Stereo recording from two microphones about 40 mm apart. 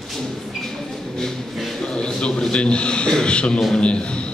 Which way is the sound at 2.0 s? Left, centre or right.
Left.